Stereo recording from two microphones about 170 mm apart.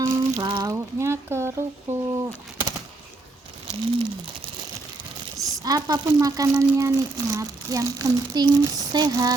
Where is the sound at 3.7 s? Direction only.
35° right (ahead or behind).